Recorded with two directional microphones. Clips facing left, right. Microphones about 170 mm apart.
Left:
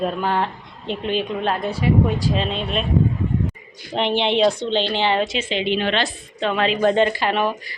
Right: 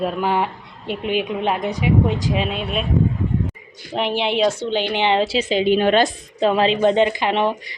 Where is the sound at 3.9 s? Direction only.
5° right (ahead or behind).